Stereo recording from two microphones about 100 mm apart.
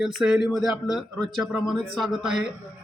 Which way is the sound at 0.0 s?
5° right (ahead or behind).